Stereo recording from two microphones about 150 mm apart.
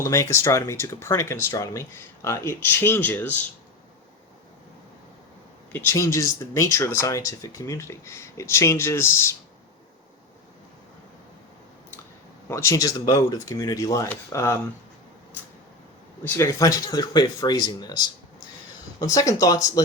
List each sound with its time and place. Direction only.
0.0 s speech: 20° left (ahead or behind)
5.7 s speech: 20° left (ahead or behind)
12.5 s speech: 20° left (ahead or behind)
16.2 s speech: 20° left (ahead or behind)
19.1 s speech: 25° left (ahead or behind)